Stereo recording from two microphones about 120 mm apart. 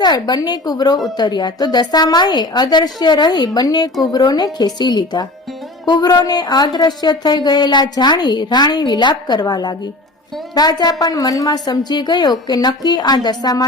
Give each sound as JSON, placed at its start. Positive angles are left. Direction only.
{"t": 0.0, "sound": "a woman's voice", "side_deg": 35}